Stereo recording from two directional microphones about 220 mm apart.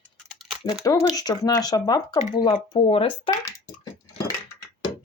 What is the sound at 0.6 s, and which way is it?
Speech, 15° left (ahead or behind).